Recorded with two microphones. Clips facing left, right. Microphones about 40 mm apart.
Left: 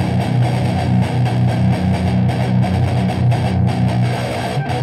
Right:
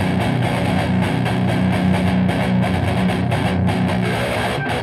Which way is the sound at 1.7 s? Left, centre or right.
Right.